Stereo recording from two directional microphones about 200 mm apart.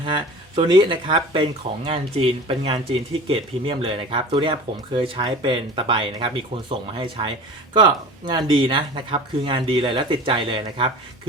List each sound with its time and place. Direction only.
0.0 s speech: 25° right (ahead or behind)